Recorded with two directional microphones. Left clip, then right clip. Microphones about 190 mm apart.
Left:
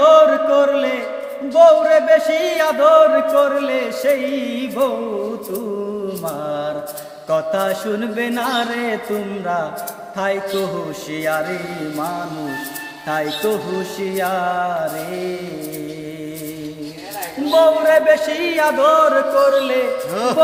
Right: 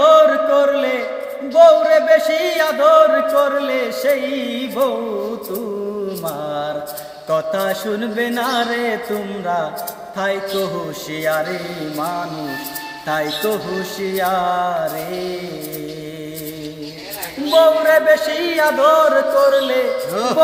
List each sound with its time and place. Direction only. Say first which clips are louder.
0.0 s chant: even; centre (ahead or behind)
6.2 s music: left 1 dB; centre (ahead or behind)
11.2 s music: right 1 dB; centre (ahead or behind)
13.1 s music: even; centre (ahead or behind)
17.5 s music: right 1 dB; centre (ahead or behind)
20.1 s music: left 1 dB; 15° left (ahead or behind)